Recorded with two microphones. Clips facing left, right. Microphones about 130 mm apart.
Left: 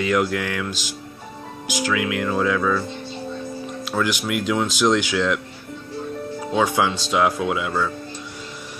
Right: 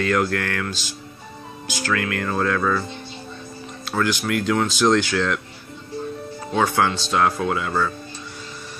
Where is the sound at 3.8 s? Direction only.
5° left (ahead or behind).